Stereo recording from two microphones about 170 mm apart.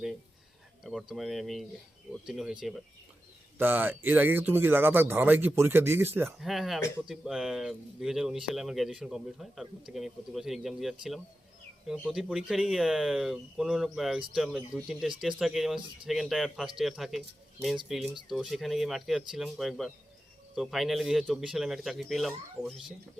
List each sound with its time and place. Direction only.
0.9 s speech: centre (ahead or behind)
3.6 s speech: 10° right (ahead or behind)
6.4 s speech: centre (ahead or behind)
12.0 s speech: 5° right (ahead or behind)